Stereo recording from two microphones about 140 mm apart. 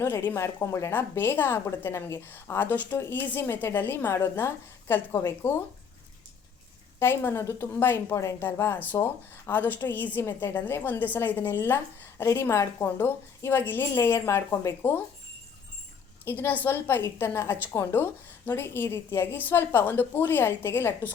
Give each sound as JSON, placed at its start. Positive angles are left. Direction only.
{"t": 0.0, "sound": "a woman's voice", "side_deg": 15}
{"t": 7.0, "sound": "a woman's voice", "side_deg": 15}
{"t": 16.2, "sound": "a woman's voice", "side_deg": 15}